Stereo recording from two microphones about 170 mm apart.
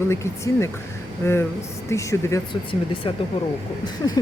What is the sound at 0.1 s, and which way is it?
Speech, 15° left (ahead or behind).